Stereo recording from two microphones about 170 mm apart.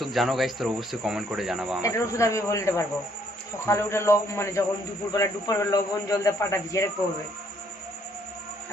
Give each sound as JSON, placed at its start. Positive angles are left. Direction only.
{"t": 0.0, "sound": "speech", "side_deg": 0}
{"t": 1.8, "sound": "a man's voice", "side_deg": 20}